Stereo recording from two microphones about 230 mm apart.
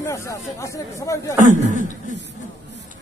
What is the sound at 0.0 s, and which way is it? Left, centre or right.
Speech, centre.